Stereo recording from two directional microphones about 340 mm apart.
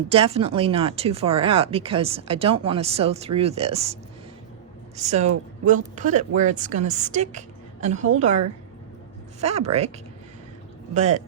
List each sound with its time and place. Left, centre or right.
0.1 s speech: centre
4.9 s a woman's voice: centre
10.9 s a woman's voice: centre